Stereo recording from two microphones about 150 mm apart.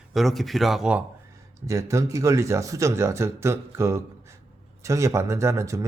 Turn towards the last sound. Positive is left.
turn(degrees=-20)  # may be behind; listen again after turning